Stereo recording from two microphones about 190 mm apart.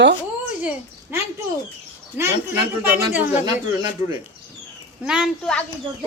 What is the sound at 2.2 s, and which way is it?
Speech, 10° right (ahead or behind).